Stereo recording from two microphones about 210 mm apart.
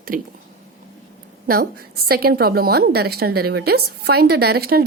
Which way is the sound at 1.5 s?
45° right (ahead or behind).